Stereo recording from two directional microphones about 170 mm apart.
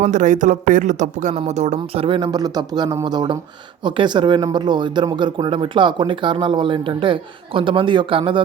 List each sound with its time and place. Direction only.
0.0 s speech: 45° right (ahead or behind); by 8.4 s 30° right (ahead or behind)